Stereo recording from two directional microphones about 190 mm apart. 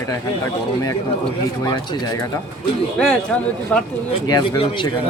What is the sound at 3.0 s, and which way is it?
Speech, 5° left (ahead or behind).